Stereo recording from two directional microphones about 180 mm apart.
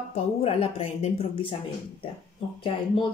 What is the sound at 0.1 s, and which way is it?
Speech, 35° left (ahead or behind).